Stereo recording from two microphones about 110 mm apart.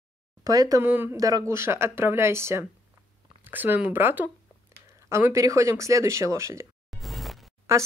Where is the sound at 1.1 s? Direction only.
35° right (ahead or behind).